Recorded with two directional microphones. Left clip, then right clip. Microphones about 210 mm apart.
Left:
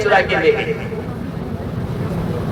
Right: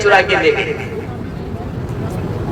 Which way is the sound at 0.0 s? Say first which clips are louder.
Right 3 dB; 45° right (ahead or behind).